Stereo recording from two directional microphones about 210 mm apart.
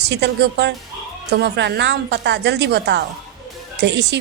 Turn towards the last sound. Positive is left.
turn(degrees=-55)  # may be behind; listen again after turning